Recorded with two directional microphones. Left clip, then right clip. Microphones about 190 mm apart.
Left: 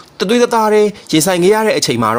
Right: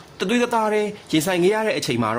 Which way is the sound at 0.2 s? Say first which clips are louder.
Left 8 dB; 35° left (ahead or behind).